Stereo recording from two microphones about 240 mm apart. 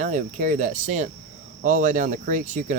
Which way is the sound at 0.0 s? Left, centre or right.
Right.